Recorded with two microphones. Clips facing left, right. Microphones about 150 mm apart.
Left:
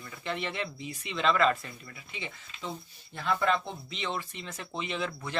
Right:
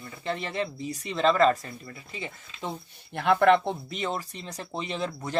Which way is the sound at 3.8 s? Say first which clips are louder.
Right 4 dB; 45° right (ahead or behind).